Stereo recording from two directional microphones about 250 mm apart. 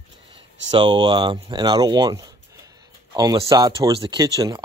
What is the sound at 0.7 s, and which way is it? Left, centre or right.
Speech, centre.